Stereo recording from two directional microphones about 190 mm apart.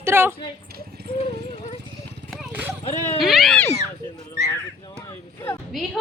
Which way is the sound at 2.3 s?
5° right (ahead or behind).